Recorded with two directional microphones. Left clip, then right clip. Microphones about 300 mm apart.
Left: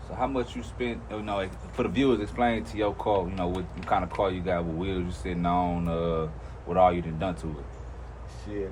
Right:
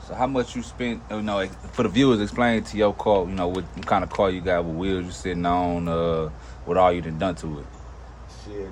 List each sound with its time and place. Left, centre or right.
0.2 s speech: right